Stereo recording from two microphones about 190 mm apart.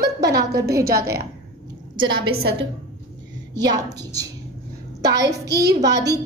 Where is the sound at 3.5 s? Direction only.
65° right (ahead or behind).